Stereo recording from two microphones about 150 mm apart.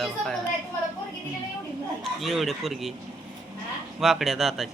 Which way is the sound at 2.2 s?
Centre (ahead or behind).